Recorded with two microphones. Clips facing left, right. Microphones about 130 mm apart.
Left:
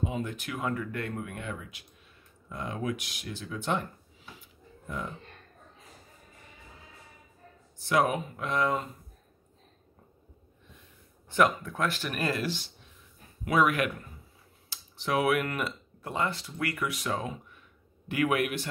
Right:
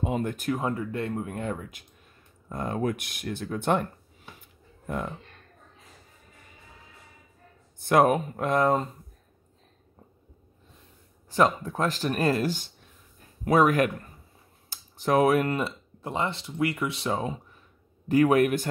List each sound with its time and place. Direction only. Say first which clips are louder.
0.0 s speech: right 4 dB; 55° right (ahead or behind)
0.5 s speech: right 5 dB; 30° right (ahead or behind); by 4.3 s 55° right (ahead or behind)
7.8 s speech: right 6 dB; 50° right (ahead or behind)
11.2 s speech: right 2 dB; 35° right (ahead or behind)